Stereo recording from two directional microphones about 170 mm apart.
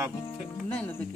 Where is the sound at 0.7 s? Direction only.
10° left (ahead or behind).